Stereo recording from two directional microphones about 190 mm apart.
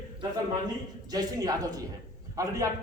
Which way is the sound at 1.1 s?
20° right (ahead or behind).